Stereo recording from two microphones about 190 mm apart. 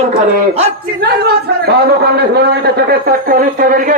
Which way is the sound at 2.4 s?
60° right (ahead or behind).